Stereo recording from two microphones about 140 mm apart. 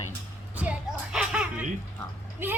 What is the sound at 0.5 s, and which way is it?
Music, 10° right (ahead or behind).